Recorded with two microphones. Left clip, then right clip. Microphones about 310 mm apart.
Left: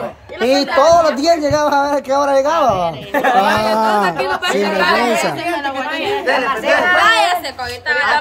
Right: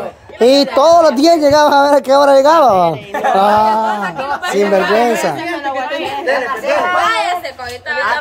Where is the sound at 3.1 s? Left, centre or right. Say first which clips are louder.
Even; left.